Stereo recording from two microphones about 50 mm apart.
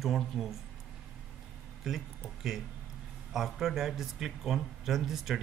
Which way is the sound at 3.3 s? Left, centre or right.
Centre.